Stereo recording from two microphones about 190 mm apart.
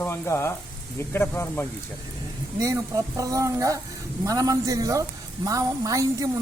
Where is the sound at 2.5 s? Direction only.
15° right (ahead or behind).